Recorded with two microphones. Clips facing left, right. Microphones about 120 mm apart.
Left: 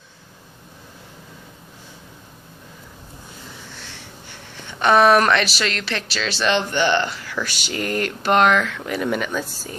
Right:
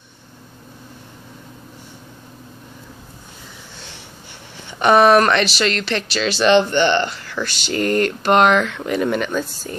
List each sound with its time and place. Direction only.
4.7 s speech: 5° right (ahead or behind)